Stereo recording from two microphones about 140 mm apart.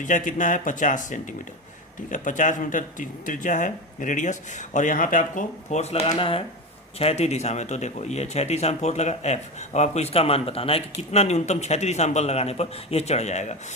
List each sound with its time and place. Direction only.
0.0 s speech: 65° left (ahead or behind)